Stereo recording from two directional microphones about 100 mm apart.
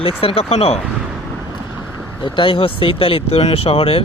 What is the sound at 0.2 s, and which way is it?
Speech, 75° left (ahead or behind).